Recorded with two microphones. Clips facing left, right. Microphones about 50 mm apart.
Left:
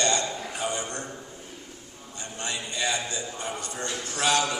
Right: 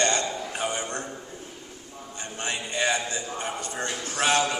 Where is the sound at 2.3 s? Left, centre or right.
Right.